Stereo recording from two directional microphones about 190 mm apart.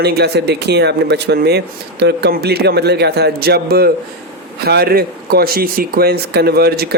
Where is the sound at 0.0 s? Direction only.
60° right (ahead or behind).